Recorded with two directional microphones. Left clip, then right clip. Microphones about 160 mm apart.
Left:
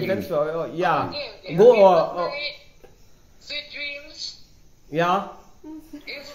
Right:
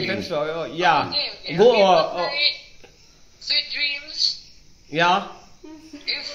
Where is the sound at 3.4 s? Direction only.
35° left (ahead or behind).